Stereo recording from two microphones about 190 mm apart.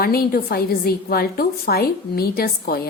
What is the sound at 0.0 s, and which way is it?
A woman's voice, 55° left (ahead or behind).